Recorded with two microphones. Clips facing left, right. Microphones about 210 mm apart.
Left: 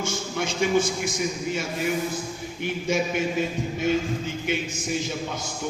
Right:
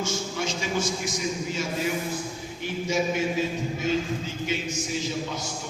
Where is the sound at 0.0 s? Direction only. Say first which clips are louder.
Left 1 dB; 55° left (ahead or behind).